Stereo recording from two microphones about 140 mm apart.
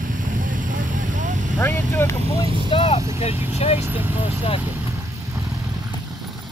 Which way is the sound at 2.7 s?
45° left (ahead or behind).